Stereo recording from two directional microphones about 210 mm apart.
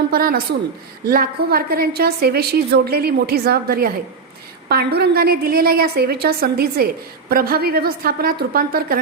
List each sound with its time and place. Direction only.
0.1 s a woman's voice: 45° right (ahead or behind)